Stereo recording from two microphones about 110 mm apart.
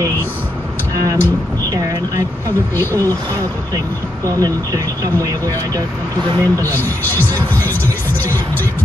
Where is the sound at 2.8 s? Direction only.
20° left (ahead or behind).